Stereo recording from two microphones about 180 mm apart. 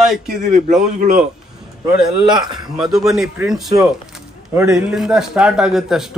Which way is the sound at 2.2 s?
25° right (ahead or behind).